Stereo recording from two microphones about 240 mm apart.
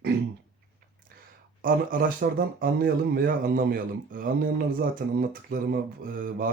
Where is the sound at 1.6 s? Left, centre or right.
Right.